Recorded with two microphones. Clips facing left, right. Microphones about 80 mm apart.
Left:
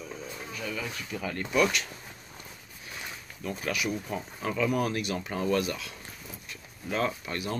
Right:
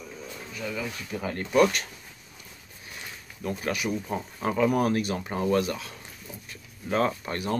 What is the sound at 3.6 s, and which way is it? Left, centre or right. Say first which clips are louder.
Speech: right 1 dB; right.